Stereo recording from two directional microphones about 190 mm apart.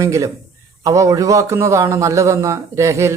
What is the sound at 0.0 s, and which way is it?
Speech, 15° right (ahead or behind).